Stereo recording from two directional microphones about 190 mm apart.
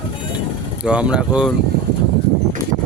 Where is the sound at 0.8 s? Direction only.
5° right (ahead or behind).